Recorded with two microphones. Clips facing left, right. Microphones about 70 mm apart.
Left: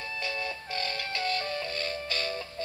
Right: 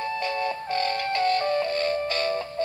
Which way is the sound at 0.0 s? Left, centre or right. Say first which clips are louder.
Right 8 dB; right.